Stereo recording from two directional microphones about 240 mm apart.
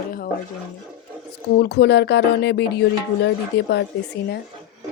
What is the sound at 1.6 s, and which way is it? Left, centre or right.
Speech, left.